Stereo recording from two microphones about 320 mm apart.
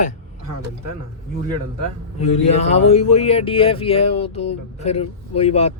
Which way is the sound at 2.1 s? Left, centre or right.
Centre.